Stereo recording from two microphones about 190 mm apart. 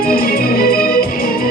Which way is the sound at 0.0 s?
50° left (ahead or behind).